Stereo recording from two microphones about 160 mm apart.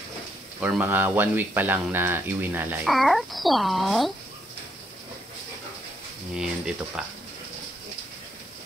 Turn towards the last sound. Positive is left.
turn(degrees=-5)  # may be behind; listen again after turning